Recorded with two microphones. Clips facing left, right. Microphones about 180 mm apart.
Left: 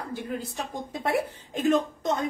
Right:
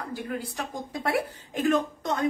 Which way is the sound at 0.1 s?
20° left (ahead or behind).